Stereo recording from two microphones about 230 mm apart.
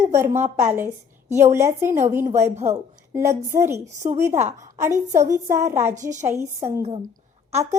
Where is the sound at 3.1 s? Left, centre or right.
Centre.